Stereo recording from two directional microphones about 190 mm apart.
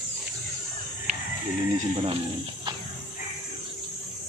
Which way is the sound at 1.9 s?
30° right (ahead or behind).